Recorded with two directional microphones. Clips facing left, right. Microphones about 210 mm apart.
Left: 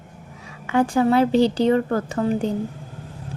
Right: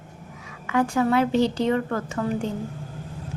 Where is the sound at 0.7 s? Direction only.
30° left (ahead or behind).